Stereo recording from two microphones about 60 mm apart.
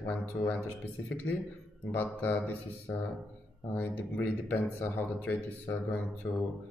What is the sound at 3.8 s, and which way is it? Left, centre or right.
Speech, left.